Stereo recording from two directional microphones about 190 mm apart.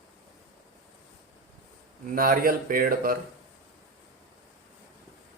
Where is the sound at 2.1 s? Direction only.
50° right (ahead or behind).